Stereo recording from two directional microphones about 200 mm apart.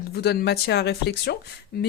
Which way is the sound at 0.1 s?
55° left (ahead or behind).